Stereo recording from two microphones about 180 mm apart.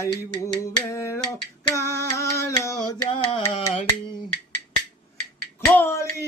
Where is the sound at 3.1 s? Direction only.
30° left (ahead or behind).